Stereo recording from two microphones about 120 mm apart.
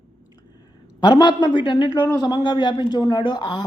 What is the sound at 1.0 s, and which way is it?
Speech, 40° left (ahead or behind).